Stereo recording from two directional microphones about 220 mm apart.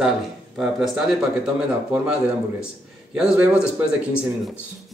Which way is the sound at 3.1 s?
5° right (ahead or behind).